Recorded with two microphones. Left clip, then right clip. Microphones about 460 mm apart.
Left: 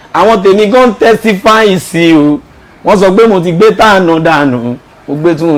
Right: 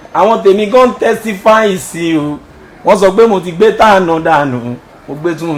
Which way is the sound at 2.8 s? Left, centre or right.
Left.